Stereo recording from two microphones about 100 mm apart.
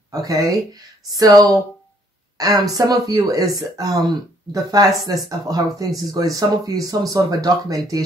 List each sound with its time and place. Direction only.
0.1 s speech: 35° right (ahead or behind)